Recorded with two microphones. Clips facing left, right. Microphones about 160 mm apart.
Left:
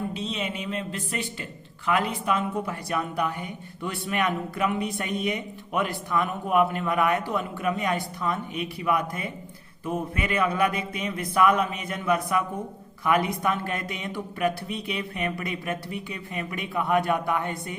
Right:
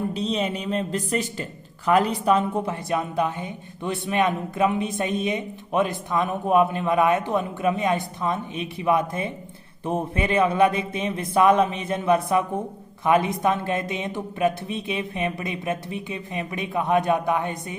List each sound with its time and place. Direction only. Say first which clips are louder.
0.1 s a woman's voice: right 6 dB; 40° right (ahead or behind); by 17.7 s 20° right (ahead or behind)